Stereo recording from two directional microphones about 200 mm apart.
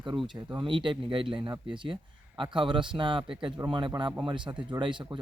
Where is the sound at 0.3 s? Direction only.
25° right (ahead or behind).